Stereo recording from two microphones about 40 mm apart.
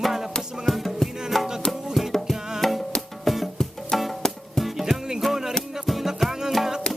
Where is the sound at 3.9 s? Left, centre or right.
Centre.